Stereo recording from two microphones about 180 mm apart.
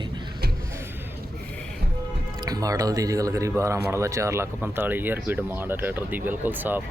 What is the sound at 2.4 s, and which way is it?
Speech, 20° right (ahead or behind).